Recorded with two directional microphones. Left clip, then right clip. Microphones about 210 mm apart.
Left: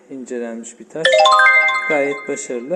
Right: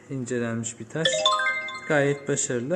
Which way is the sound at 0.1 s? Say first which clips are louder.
Left 3 dB; centre (ahead or behind).